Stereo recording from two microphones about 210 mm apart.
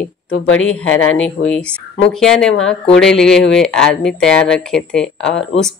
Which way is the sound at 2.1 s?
Centre (ahead or behind).